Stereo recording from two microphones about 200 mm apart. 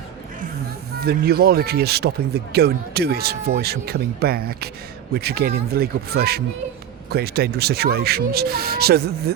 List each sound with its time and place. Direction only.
0.9 s speech: 50° right (ahead or behind)